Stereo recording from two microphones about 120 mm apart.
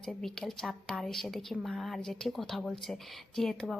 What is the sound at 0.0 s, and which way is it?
Speech, 5° left (ahead or behind).